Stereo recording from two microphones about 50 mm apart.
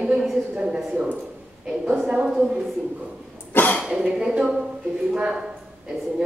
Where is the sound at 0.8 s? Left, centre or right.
Centre.